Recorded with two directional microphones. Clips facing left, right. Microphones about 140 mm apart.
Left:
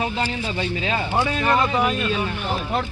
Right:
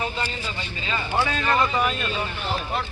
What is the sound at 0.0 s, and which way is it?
Speech, 80° left.